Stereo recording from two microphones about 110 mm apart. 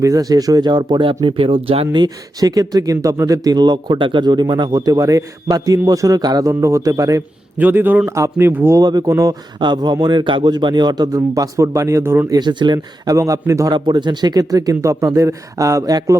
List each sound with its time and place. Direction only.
0.0 s speech: 35° right (ahead or behind); by 2.0 s 55° right (ahead or behind)
2.0 s speech: 35° right (ahead or behind)
7.6 s a man's voice: 15° right (ahead or behind)
8.8 s speech: 35° right (ahead or behind); by 12.3 s 20° right (ahead or behind)
12.3 s speech: 40° right (ahead or behind)
13.7 s speech: 40° right (ahead or behind)